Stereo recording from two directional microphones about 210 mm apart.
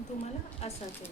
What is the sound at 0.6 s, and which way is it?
Speech, 30° left (ahead or behind).